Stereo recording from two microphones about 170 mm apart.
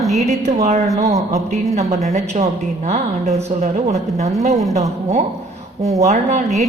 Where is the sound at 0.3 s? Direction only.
40° right (ahead or behind).